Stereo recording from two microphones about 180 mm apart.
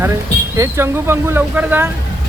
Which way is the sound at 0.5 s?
15° right (ahead or behind).